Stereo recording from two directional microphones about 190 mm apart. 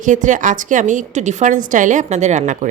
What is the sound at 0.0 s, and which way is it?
A woman's voice, 40° right (ahead or behind).